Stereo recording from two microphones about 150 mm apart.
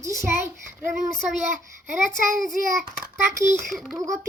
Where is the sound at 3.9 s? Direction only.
25° right (ahead or behind).